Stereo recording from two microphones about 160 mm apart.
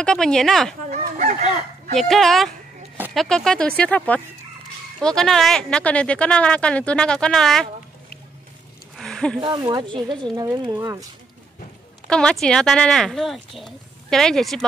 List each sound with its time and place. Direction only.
0.0 s speech: 5° left (ahead or behind)
0.8 s chicken: 50° right (ahead or behind)
2.0 s speech: centre (ahead or behind)
8.9 s a sound: centre (ahead or behind)
9.4 s speech: 30° right (ahead or behind)
12.1 s speech: 5° left (ahead or behind)